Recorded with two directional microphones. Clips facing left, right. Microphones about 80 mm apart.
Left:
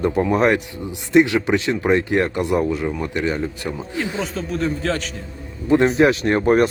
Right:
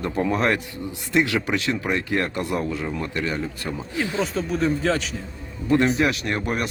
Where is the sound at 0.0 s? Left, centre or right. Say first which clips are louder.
Left 5 dB; left.